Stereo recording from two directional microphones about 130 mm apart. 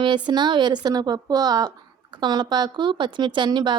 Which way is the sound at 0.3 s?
35° right (ahead or behind).